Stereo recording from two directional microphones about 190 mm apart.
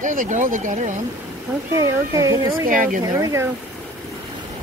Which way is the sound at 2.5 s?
45° right (ahead or behind).